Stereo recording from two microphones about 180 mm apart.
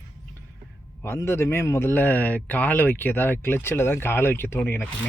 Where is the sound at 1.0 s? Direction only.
15° left (ahead or behind).